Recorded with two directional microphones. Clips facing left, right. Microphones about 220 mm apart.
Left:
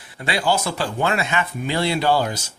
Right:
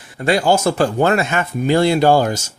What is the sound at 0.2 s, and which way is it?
Speech, 45° right (ahead or behind).